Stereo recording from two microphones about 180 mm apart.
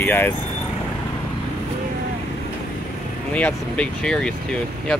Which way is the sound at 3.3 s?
5° left (ahead or behind).